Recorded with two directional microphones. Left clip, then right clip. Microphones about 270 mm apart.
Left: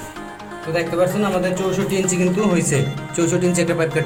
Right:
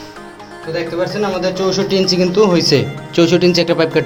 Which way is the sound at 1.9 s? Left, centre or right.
Right.